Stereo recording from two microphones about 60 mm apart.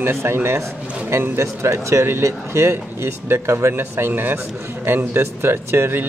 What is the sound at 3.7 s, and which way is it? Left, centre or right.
Speech, right.